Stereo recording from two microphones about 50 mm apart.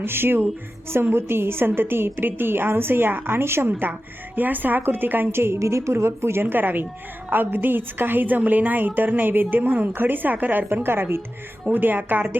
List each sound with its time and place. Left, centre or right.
0.0 s a woman's voice: right
4.4 s a woman's voice: right
5.3 s a woman's voice: right
10.8 s a woman's voice: right